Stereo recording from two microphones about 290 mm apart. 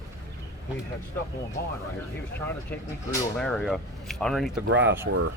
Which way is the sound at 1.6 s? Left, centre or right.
Left.